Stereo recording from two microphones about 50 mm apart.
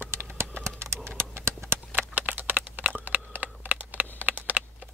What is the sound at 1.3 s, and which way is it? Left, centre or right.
Clip-clop, right.